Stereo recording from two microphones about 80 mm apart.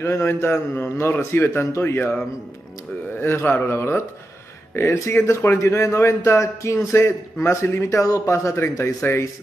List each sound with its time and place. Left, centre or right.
0.0 s a man's voice: left
3.2 s a man's voice: left
5.1 s a man's voice: left